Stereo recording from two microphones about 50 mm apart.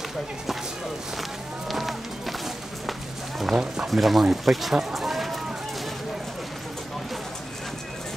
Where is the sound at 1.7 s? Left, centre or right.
Centre.